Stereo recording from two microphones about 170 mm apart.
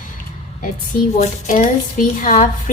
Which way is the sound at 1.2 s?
45° left (ahead or behind).